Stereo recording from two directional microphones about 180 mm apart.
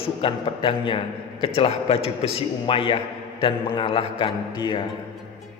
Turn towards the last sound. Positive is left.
turn(degrees=25)  # may be behind; listen again after turning